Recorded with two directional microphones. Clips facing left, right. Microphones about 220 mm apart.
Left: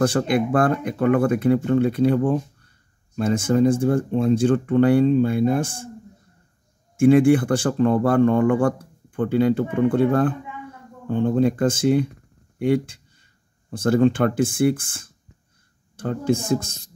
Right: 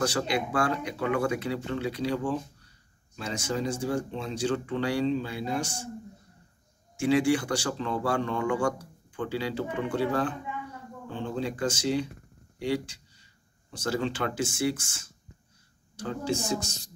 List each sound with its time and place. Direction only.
0.0 s a man's voice: 50° left (ahead or behind)
7.0 s a man's voice: 55° left (ahead or behind)